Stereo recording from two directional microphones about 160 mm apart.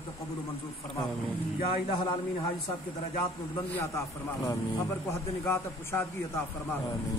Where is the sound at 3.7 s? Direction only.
20° left (ahead or behind).